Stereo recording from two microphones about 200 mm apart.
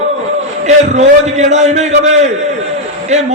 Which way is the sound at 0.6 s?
35° right (ahead or behind).